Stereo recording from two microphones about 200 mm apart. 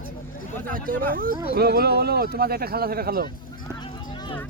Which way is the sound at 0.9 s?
45° right (ahead or behind).